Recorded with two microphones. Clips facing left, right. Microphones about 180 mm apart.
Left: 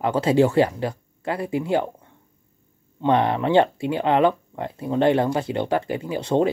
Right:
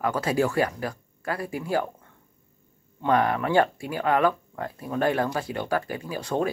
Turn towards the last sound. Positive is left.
turn(degrees=25)  # may be behind; listen again after turning